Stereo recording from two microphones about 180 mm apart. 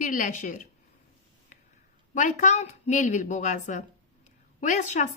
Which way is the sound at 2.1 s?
45° left (ahead or behind).